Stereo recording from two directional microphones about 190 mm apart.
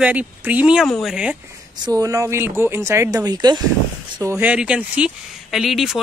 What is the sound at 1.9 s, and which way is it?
Speech, 20° right (ahead or behind).